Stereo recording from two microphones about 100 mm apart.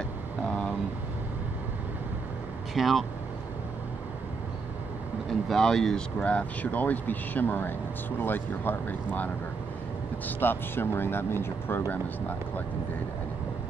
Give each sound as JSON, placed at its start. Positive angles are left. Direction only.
{"t": 0.4, "sound": "vehicle", "side_deg": 5}
{"t": 2.7, "sound": "speech", "side_deg": 0}
{"t": 5.5, "sound": "speech", "side_deg": 5}